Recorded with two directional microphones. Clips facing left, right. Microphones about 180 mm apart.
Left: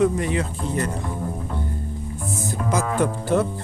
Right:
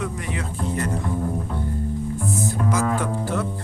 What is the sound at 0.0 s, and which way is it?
Speech, 25° left (ahead or behind).